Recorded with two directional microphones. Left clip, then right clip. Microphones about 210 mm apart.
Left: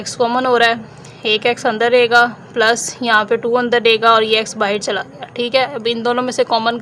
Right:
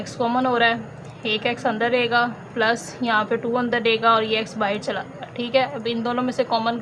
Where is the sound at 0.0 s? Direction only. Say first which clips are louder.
Left 6 dB; 55° left (ahead or behind).